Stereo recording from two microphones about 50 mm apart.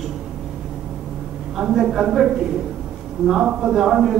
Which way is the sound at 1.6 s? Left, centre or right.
Centre.